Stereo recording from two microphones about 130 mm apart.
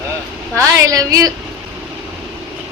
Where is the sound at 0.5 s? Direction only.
25° right (ahead or behind).